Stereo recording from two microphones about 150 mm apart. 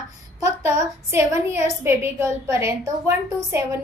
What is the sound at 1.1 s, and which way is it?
A woman's voice, 20° right (ahead or behind).